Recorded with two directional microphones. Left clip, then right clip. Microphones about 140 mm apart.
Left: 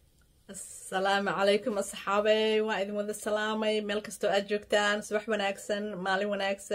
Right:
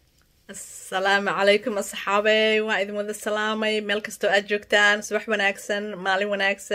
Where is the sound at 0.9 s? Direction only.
10° right (ahead or behind).